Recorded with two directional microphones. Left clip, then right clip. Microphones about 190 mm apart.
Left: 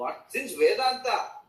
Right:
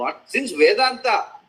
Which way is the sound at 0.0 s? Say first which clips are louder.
Right 8 dB; 40° right (ahead or behind).